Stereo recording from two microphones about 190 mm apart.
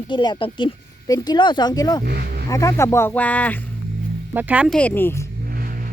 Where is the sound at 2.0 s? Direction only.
55° right (ahead or behind).